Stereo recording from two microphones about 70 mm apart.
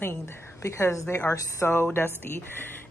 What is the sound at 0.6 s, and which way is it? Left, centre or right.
A woman's voice, left.